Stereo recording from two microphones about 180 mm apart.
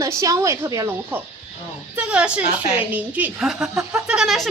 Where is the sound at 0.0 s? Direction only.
15° right (ahead or behind).